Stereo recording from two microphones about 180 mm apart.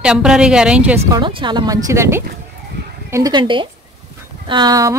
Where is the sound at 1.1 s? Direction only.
25° right (ahead or behind).